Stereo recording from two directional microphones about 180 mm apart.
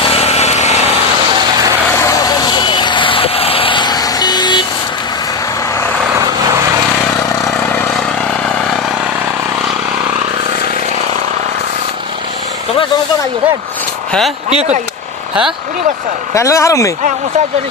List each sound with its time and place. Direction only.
0.0 s a sound: 35° left (ahead or behind)
2.0 s vehicle: 20° left (ahead or behind)
7.2 s vehicle: 5° left (ahead or behind)
14.5 s speech: 35° right (ahead or behind)
16.3 s speech: 15° left (ahead or behind)